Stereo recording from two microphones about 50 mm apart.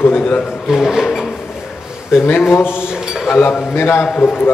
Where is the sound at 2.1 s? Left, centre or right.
Left.